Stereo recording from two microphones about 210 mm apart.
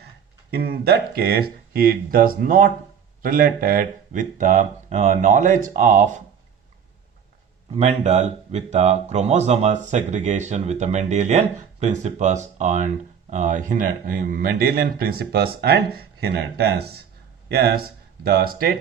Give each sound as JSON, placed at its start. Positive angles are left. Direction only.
{"t": 0.5, "sound": "speech", "side_deg": -50}
{"t": 7.7, "sound": "speech", "side_deg": -30}